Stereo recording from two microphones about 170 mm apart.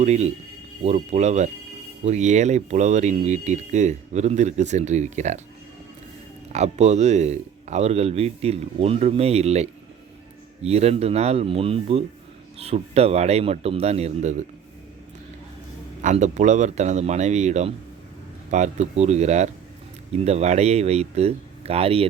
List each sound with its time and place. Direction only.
0.0 s speech: 40° right (ahead or behind)
6.5 s speech: 40° right (ahead or behind)
16.0 s speech: 45° right (ahead or behind)